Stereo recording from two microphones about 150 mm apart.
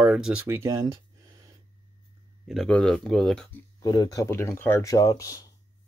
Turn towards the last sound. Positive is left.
turn(degrees=25)  # may be behind; listen again after turning